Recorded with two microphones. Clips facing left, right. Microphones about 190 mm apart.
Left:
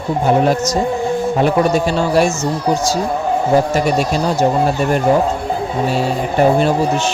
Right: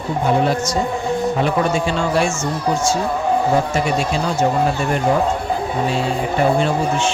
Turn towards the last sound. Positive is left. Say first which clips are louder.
# left 4 dB
turn(degrees=40)  # may be behind; listen again after turning